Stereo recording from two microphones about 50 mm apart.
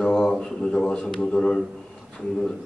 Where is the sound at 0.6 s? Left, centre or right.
Centre.